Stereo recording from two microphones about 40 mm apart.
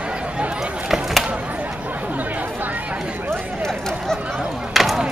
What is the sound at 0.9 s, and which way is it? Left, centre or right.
Chop, centre.